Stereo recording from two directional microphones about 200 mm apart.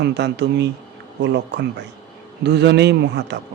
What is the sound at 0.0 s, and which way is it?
Speech, 60° right (ahead or behind).